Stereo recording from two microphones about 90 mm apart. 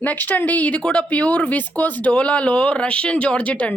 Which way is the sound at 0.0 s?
20° left (ahead or behind).